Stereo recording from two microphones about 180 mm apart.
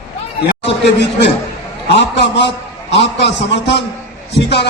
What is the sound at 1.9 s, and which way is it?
A man's voice, 70° left (ahead or behind).